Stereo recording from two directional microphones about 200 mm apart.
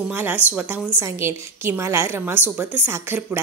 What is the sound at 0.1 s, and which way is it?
A woman's voice, 10° right (ahead or behind).